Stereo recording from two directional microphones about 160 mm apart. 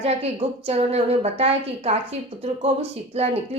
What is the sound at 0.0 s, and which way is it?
Speech, 40° right (ahead or behind).